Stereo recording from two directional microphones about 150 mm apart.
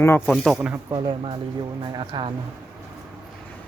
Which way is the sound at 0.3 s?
Centre (ahead or behind).